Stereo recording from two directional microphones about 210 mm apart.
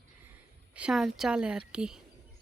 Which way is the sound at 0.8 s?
5° right (ahead or behind).